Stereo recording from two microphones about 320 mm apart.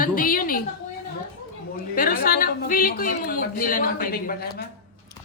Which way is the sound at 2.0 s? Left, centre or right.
Left.